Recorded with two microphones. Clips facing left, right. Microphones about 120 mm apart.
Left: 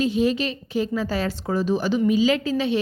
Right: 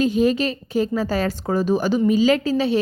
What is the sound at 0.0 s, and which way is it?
A woman's voice, 45° right (ahead or behind).